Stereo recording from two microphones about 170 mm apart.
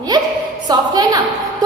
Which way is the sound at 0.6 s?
25° right (ahead or behind).